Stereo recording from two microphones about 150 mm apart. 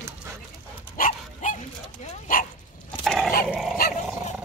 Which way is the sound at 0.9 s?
60° left (ahead or behind).